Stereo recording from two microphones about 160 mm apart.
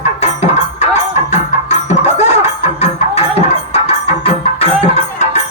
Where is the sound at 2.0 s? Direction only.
45° left (ahead or behind).